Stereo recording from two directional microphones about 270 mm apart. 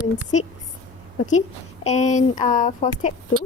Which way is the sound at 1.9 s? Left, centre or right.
Left.